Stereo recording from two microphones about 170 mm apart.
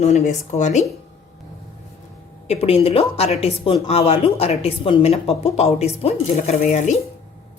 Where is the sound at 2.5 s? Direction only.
35° left (ahead or behind).